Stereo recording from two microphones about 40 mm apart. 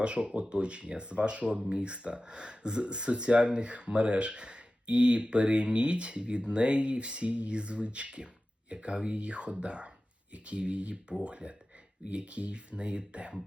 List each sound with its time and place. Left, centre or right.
0.0 s speech: right